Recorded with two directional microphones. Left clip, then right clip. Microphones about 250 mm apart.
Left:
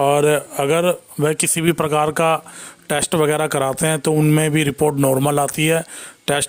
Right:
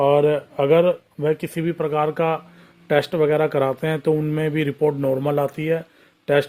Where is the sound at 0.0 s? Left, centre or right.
Left.